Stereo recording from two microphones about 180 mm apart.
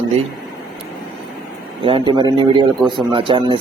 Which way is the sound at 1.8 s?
25° right (ahead or behind).